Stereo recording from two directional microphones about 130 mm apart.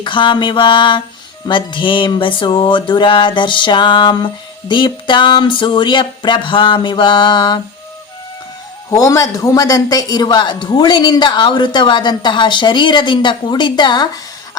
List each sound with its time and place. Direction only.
0.0 s a man's voice: 40° left (ahead or behind)
9.0 s a man's voice: 25° left (ahead or behind)